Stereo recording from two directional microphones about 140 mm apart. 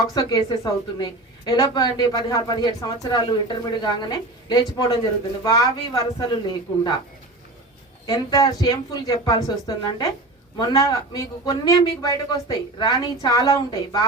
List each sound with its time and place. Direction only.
0.1 s speech: 25° left (ahead or behind)
8.0 s speech: 25° left (ahead or behind)